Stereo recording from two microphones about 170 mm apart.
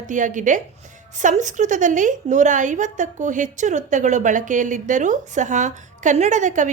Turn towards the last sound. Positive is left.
turn(degrees=-45)  # may be behind; listen again after turning